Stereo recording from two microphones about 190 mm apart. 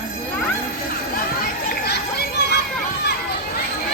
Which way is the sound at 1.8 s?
60° left (ahead or behind).